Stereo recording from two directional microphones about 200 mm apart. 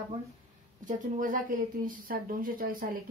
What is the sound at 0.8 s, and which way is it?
A woman's voice, 40° right (ahead or behind).